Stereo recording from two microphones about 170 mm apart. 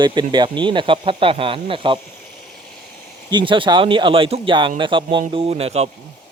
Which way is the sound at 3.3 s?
30° right (ahead or behind).